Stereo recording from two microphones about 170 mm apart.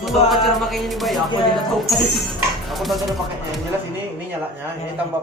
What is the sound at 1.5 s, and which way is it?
Speech, centre (ahead or behind).